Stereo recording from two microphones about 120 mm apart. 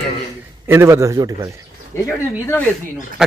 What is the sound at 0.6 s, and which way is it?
Speech, 20° right (ahead or behind).